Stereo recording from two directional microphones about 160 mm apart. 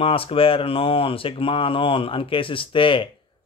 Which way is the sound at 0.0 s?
35° left (ahead or behind).